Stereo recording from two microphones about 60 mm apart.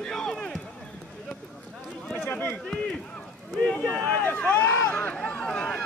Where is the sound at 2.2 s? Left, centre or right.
Left.